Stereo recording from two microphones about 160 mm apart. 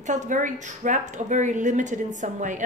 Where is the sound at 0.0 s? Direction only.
50° right (ahead or behind).